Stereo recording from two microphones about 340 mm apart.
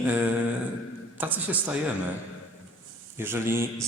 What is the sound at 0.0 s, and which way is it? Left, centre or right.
A man's voice, centre.